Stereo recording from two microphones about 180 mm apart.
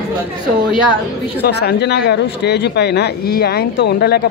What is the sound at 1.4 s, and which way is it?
Speech, 65° left (ahead or behind).